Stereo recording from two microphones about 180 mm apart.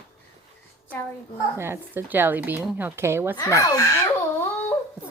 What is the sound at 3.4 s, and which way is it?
Speech, 20° left (ahead or behind).